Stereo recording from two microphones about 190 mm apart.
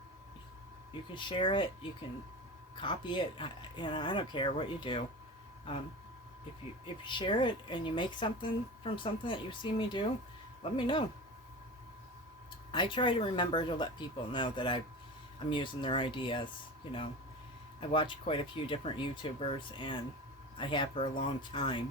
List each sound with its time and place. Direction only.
1.1 s speech: 25° left (ahead or behind)
6.8 s speech: 25° left (ahead or behind)
12.7 s speech: 25° left (ahead or behind)
17.7 s speech: 25° left (ahead or behind)